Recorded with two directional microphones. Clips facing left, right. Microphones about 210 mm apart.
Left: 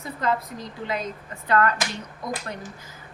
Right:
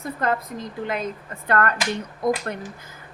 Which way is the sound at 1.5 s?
55° right (ahead or behind).